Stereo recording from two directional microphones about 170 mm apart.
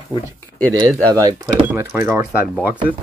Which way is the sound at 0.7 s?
20° right (ahead or behind).